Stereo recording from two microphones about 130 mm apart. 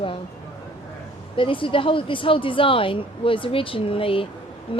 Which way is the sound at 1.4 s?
40° left (ahead or behind).